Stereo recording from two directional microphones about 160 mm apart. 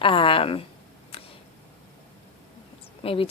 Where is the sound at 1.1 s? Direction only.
35° left (ahead or behind).